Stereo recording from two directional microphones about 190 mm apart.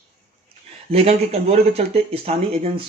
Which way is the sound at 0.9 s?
35° right (ahead or behind).